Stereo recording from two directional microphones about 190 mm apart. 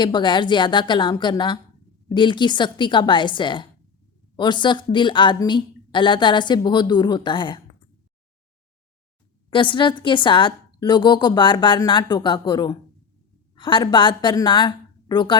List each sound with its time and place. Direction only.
0.0 s speech: 25° left (ahead or behind)
9.5 s speech: 25° left (ahead or behind)